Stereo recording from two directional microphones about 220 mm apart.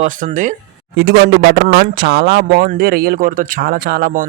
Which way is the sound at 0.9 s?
50° right (ahead or behind).